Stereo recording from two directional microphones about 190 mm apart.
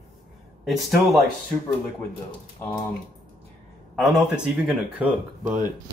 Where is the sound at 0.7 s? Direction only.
Centre (ahead or behind).